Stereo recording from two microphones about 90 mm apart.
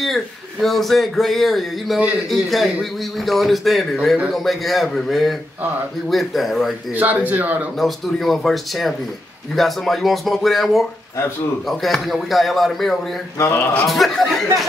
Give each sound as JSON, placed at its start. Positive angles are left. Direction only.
{"t": 0.0, "sound": "speech", "side_deg": 0}
{"t": 6.9, "sound": "speech", "side_deg": -15}
{"t": 7.7, "sound": "speech", "side_deg": 0}